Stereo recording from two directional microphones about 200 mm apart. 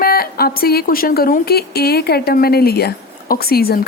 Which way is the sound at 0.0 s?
50° left (ahead or behind).